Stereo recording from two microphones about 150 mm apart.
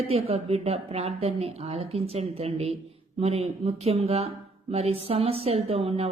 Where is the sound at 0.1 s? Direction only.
40° right (ahead or behind).